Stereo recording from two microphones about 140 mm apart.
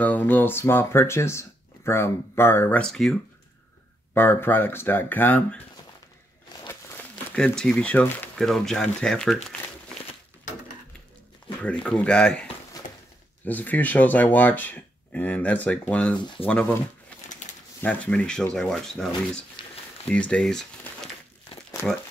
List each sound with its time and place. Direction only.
0.0 s speech: 10° left (ahead or behind)
4.1 s speech: 15° left (ahead or behind)
7.3 s speech: 5° left (ahead or behind)
11.6 s speech: 10° left (ahead or behind)
13.5 s speech: 10° left (ahead or behind)
16.4 s speech: 40° left (ahead or behind)
17.8 s speech: 10° left (ahead or behind)